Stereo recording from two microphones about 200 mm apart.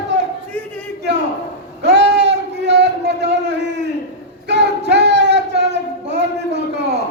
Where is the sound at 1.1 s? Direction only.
60° right (ahead or behind).